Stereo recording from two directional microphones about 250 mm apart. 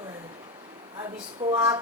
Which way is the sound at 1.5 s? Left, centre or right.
Centre.